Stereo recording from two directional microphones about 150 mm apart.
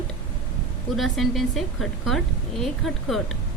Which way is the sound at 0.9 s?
Centre (ahead or behind).